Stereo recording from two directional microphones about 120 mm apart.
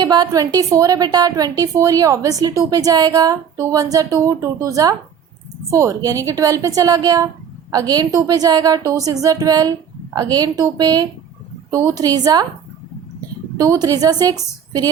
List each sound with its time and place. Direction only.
0.0 s a woman's voice: 35° right (ahead or behind)
13.6 s a woman's voice: 30° right (ahead or behind)